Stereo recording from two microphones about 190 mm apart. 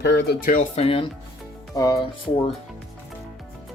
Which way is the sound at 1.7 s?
20° left (ahead or behind).